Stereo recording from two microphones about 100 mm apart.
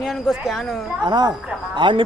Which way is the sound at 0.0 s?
5° right (ahead or behind).